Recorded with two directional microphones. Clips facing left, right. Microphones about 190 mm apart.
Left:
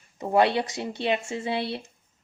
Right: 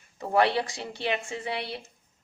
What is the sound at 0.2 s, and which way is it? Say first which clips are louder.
Speech: left 2 dB; 20° left (ahead or behind).